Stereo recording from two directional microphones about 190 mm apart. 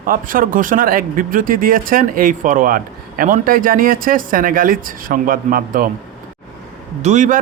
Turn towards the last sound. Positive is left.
turn(degrees=-40)  # may be behind; listen again after turning